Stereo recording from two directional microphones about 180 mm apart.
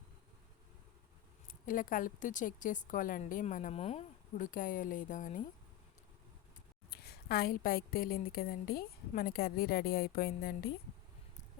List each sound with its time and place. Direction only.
1.5 s a woman's voice: 50° left (ahead or behind)
6.9 s a woman's voice: 60° left (ahead or behind)